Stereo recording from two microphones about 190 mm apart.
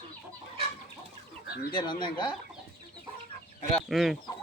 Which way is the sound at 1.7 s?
25° left (ahead or behind).